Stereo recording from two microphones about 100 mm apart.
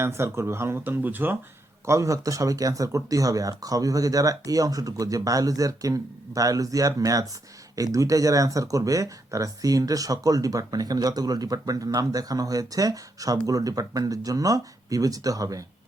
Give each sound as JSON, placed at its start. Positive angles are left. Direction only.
{"t": 0.0, "sound": "speech", "side_deg": -25}
{"t": 1.8, "sound": "speech", "side_deg": -30}